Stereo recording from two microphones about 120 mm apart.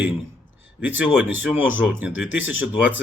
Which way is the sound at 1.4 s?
15° right (ahead or behind).